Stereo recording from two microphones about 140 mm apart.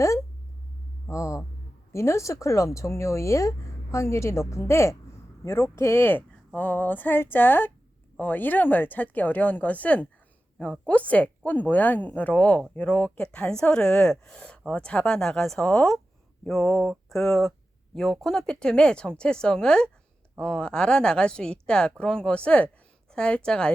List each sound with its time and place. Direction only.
1.0 s hum: 20° left (ahead or behind)
1.9 s speech: 20° left (ahead or behind)